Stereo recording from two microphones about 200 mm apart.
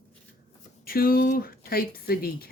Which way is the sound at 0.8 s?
45° left (ahead or behind).